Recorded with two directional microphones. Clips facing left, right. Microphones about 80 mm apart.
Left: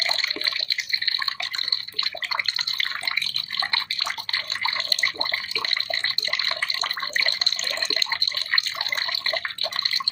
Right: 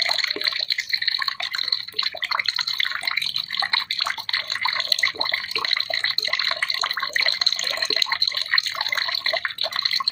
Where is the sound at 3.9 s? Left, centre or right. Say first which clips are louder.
Right 2 dB; right.